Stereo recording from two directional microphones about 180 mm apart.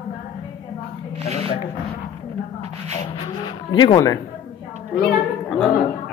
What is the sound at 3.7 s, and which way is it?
Speech, 25° left (ahead or behind).